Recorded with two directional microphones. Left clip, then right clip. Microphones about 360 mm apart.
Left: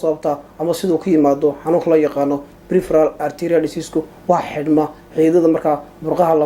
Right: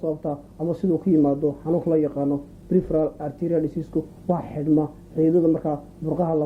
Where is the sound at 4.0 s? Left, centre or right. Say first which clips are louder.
Left 10 dB; centre.